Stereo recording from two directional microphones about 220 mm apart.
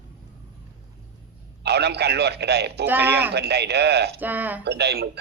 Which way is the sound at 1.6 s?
50° right (ahead or behind).